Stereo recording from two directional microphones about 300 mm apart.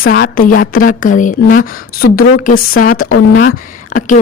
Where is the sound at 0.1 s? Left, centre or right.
Left.